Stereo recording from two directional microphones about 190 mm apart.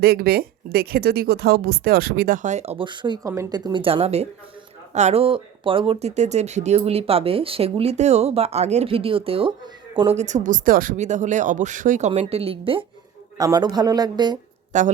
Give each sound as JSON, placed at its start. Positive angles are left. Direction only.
{"t": 0.0, "sound": "speech", "side_deg": -55}
{"t": 14.7, "sound": "speech", "side_deg": -40}